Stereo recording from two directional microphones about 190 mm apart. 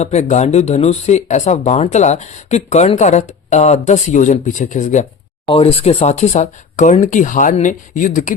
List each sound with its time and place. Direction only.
0.0 s speech: 35° left (ahead or behind)